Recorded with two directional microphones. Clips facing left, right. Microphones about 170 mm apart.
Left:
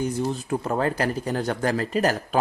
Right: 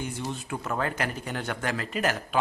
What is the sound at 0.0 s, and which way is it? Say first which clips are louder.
Speech: left 8 dB; 40° left (ahead or behind).